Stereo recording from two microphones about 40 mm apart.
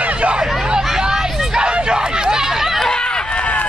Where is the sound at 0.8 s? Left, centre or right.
Centre.